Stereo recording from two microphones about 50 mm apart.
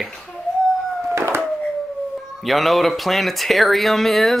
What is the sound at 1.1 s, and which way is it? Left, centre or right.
Dog, right.